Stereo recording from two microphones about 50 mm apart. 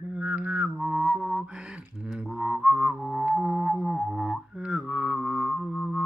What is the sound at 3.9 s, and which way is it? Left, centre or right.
Music, centre.